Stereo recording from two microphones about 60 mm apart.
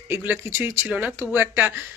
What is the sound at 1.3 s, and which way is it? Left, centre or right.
Speech, right.